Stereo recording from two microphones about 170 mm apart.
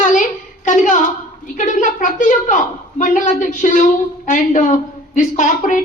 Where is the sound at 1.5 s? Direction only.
50° left (ahead or behind).